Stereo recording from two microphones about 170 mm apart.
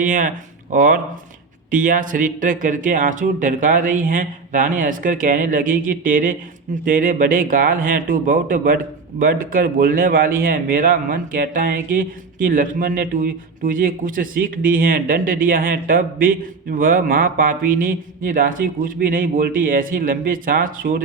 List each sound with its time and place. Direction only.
0.0 s speech: 50° right (ahead or behind)